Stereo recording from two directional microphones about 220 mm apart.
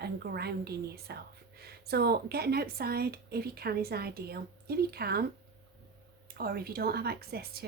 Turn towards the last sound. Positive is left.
turn(degrees=-45)  # may be behind; listen again after turning